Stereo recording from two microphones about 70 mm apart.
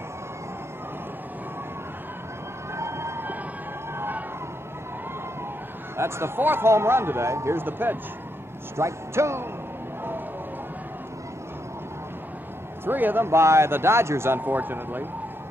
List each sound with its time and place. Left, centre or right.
2.7 s train: right
5.9 s speech: right
8.7 s speech: right
12.8 s speech: right